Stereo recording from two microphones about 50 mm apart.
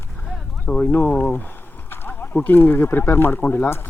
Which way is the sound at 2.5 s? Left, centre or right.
Left.